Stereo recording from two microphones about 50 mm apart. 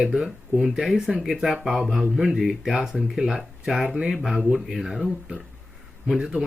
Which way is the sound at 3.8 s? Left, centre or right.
Centre.